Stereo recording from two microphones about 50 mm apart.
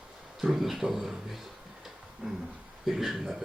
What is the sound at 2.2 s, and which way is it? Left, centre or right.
Speech, right.